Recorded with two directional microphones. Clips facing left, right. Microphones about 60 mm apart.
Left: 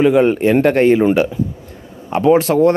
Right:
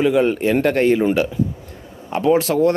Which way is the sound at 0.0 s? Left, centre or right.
Left.